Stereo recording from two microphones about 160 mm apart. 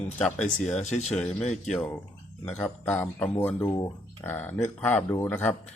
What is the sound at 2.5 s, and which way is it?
Speech, 10° left (ahead or behind).